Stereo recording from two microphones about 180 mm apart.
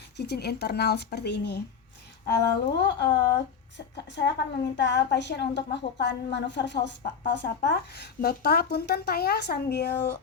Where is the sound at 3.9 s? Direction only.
70° left (ahead or behind).